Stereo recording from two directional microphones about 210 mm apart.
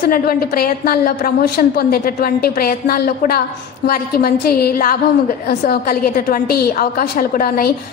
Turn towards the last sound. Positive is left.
turn(degrees=45)  # may be behind; listen again after turning